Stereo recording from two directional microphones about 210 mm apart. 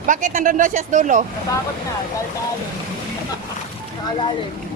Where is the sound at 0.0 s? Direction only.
40° right (ahead or behind).